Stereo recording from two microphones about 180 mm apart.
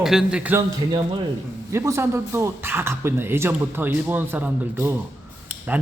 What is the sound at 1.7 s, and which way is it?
Speech, 15° right (ahead or behind).